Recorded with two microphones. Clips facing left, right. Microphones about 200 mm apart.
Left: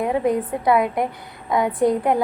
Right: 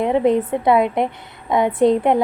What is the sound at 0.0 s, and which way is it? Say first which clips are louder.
A woman's voice: right 4 dB; 25° right (ahead or behind).